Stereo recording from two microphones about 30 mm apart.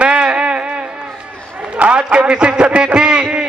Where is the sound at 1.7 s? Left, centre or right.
Right.